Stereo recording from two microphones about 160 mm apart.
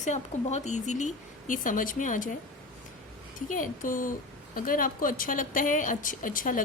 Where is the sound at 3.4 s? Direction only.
55° left (ahead or behind).